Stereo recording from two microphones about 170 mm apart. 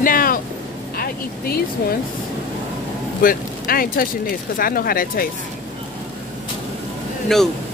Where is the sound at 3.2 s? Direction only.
60° left (ahead or behind).